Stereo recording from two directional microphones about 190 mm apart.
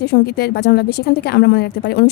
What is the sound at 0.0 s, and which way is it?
A woman's voice, 55° left (ahead or behind).